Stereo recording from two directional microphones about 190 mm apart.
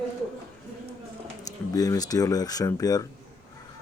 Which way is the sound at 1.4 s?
20° left (ahead or behind).